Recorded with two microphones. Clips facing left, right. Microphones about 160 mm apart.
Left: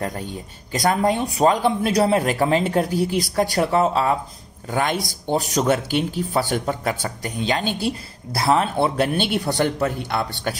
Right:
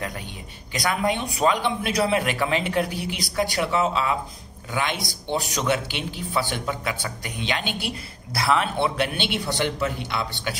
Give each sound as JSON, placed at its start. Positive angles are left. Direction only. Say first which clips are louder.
{"t": 0.7, "sound": "a man's voice", "louder": "left 5 dB", "side_deg": 40}